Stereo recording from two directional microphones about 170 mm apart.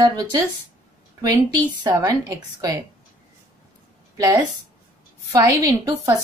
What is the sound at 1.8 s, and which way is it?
A woman's voice, 25° right (ahead or behind).